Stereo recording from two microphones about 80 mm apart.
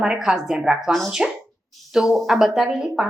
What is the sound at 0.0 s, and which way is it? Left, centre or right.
Speech, centre.